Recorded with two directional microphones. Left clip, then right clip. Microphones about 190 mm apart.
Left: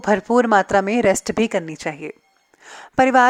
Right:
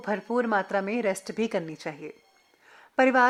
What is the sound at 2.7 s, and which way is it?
Speech, 40° left (ahead or behind).